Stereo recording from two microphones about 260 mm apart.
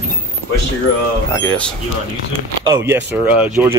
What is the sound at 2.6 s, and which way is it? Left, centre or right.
Speech, centre.